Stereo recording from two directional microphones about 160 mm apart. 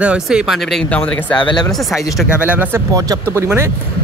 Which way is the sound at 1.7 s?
Centre (ahead or behind).